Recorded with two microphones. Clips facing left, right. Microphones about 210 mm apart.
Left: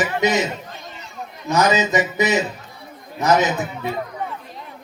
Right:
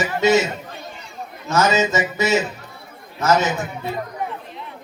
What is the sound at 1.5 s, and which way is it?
A man's voice, 15° left (ahead or behind).